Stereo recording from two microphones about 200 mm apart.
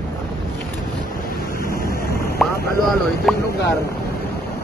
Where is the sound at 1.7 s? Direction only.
50° left (ahead or behind).